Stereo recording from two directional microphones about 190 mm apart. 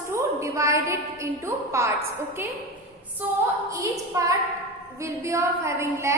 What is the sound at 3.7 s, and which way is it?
A woman's voice, 15° right (ahead or behind).